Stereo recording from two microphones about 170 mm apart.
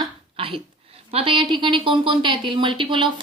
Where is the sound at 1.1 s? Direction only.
30° right (ahead or behind).